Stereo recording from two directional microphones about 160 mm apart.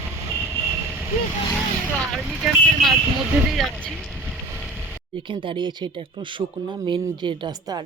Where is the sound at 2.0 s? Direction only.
Centre (ahead or behind).